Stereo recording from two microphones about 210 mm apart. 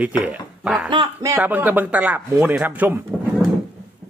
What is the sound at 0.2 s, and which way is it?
Speech, 5° right (ahead or behind).